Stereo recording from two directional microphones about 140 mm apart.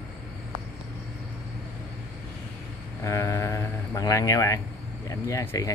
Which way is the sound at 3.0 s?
20° left (ahead or behind).